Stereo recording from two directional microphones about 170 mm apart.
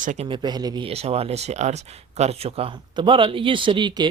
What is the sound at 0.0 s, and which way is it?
Speech, 45° right (ahead or behind).